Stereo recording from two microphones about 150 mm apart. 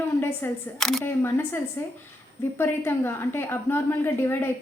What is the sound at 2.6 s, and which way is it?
A woman's voice, 15° left (ahead or behind).